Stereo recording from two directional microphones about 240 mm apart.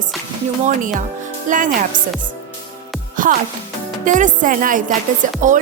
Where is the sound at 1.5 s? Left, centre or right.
Right.